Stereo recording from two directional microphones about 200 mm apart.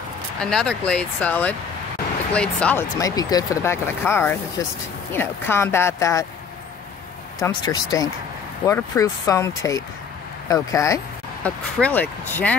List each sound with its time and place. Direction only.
0.4 s speech: 5° left (ahead or behind)
3.0 s speech: 20° left (ahead or behind)
7.3 s speech: 20° left (ahead or behind)